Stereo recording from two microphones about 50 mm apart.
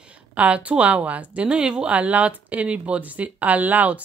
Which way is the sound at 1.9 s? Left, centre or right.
Right.